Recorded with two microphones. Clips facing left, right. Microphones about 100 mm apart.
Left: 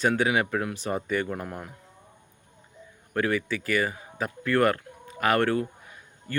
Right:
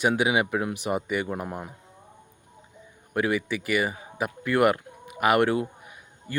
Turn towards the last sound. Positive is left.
turn(degrees=-15)  # may be behind; listen again after turning